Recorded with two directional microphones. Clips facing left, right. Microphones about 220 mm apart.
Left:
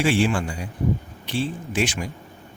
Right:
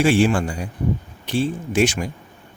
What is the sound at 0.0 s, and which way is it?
Speech, 45° right (ahead or behind).